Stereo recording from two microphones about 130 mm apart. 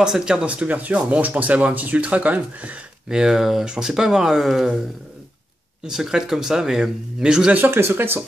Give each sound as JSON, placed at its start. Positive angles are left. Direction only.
{"t": 0.0, "sound": "speech", "side_deg": -5}
{"t": 5.9, "sound": "speech", "side_deg": -5}